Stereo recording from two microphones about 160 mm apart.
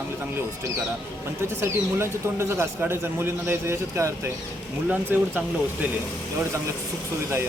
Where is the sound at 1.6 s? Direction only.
15° right (ahead or behind).